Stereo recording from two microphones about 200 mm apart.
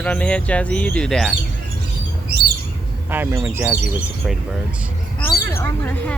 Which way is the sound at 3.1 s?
10° right (ahead or behind).